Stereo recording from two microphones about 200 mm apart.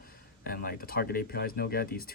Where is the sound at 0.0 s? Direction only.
50° left (ahead or behind).